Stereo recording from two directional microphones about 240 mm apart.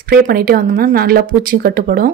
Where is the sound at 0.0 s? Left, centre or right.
Right.